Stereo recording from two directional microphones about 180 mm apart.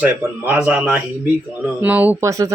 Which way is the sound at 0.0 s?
10° right (ahead or behind).